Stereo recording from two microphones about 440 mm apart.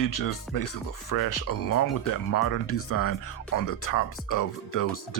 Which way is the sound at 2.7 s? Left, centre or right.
Left.